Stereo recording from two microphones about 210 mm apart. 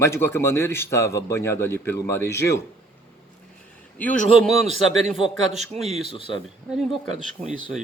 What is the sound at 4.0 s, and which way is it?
Speech, 5° left (ahead or behind).